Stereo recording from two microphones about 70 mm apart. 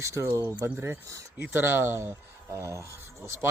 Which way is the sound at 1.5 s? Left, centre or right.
Right.